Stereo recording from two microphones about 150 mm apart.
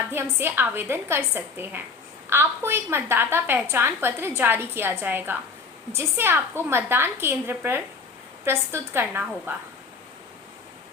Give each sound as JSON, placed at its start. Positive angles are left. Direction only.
{"t": 0.1, "sound": "a woman's voice", "side_deg": -15}
{"t": 8.9, "sound": "a woman's voice", "side_deg": -15}